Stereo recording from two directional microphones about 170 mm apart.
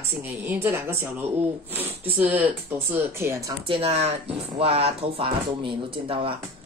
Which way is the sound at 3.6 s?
35° right (ahead or behind).